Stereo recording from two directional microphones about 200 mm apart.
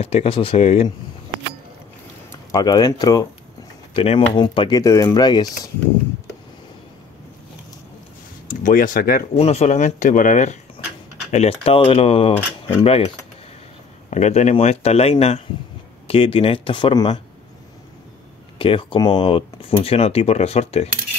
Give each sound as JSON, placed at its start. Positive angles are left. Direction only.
{"t": 0.0, "sound": "speech", "side_deg": 30}
{"t": 2.5, "sound": "speech", "side_deg": 20}
{"t": 3.9, "sound": "speech", "side_deg": 30}
{"t": 8.5, "sound": "speech", "side_deg": 40}
{"t": 9.3, "sound": "speech", "side_deg": 30}
{"t": 14.1, "sound": "speech", "side_deg": 35}
{"t": 18.6, "sound": "speech", "side_deg": 25}